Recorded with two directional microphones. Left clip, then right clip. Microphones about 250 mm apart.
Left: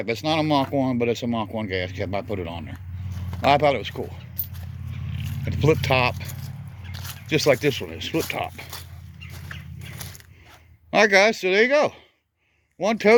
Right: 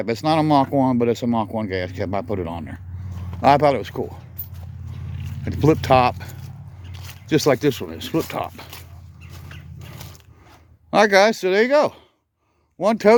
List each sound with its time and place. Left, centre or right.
0.0 s speech: right
5.5 s speech: right
9.7 s biting: centre
10.9 s speech: centre